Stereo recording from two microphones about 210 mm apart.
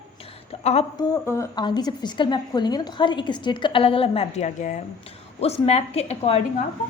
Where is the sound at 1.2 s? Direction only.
15° left (ahead or behind); by 6.4 s 30° left (ahead or behind).